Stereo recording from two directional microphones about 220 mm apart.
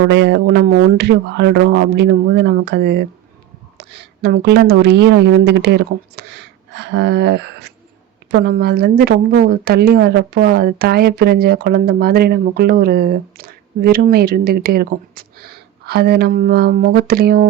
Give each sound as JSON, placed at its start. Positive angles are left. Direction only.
{"t": 0.1, "sound": "a woman's voice", "side_deg": -50}